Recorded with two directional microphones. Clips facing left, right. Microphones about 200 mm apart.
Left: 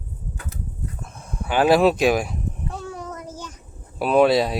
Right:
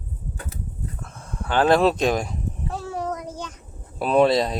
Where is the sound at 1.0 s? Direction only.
15° left (ahead or behind).